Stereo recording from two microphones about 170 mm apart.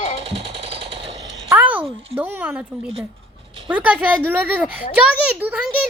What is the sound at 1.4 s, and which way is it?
Speech, 10° right (ahead or behind).